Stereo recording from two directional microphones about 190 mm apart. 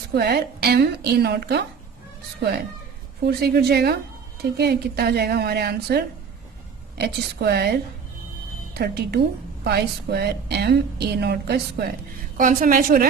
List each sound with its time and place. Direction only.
0.1 s a woman's voice: 60° right (ahead or behind)
3.2 s a woman's voice: 55° right (ahead or behind)
12.4 s a woman's voice: 45° right (ahead or behind)